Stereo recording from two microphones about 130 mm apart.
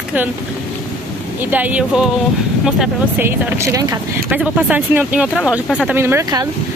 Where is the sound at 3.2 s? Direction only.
20° right (ahead or behind).